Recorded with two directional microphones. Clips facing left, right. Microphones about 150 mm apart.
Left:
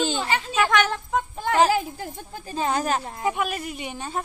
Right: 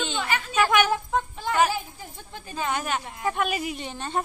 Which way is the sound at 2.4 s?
35° left (ahead or behind).